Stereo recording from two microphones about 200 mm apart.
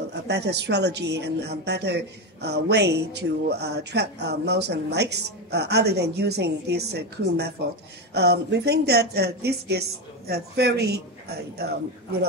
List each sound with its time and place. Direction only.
0.1 s speech: 55° right (ahead or behind)